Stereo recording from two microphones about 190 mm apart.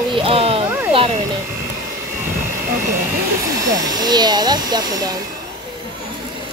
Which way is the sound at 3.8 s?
20° right (ahead or behind).